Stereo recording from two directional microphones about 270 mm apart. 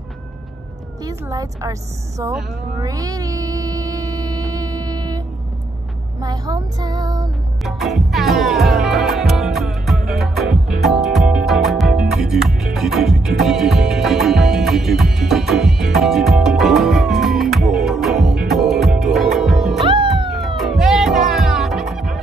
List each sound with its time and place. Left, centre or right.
1.0 s a woman's voice: centre
2.8 s music: centre
6.2 s a woman's voice: centre
7.6 s music: centre
19.8 s cat: centre
20.3 s music: centre